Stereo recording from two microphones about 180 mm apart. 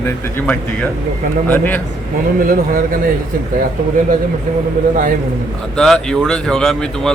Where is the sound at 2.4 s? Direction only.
50° right (ahead or behind).